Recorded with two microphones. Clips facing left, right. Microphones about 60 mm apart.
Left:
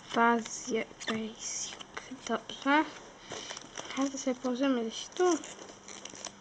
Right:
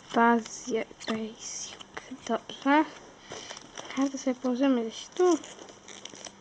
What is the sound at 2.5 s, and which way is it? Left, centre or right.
Speech, right.